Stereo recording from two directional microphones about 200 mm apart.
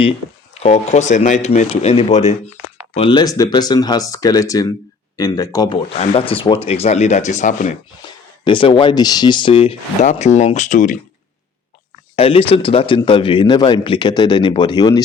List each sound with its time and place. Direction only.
0.6 s speech: 35° left (ahead or behind); by 5.7 s 20° left (ahead or behind)
5.9 s speech: 30° left (ahead or behind)
8.0 s speech: 25° left (ahead or behind)
12.1 s speech: 30° left (ahead or behind)